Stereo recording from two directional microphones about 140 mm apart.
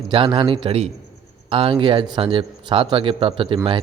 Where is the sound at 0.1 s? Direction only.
35° right (ahead or behind).